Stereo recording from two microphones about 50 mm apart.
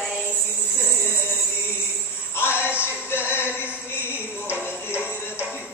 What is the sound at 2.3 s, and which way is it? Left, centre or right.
Speech, left.